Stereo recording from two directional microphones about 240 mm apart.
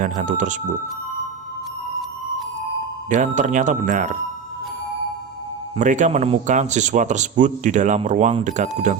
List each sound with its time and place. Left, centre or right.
0.0 s speech: right
3.1 s speech: right
5.7 s speech: right